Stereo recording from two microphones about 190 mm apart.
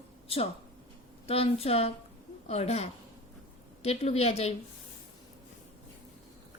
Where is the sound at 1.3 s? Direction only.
30° left (ahead or behind).